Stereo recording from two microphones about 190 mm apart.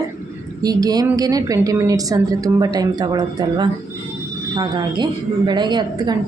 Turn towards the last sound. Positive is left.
turn(degrees=-20)  # may be behind; listen again after turning